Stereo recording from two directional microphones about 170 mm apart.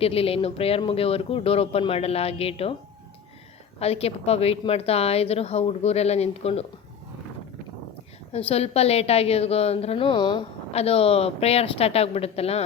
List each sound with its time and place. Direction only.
0.0 s a woman's voice: 35° left (ahead or behind)
3.8 s a woman's voice: 35° left (ahead or behind)
8.3 s a woman's voice: 35° left (ahead or behind)